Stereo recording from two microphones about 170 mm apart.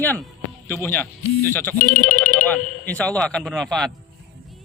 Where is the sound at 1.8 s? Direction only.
50° left (ahead or behind).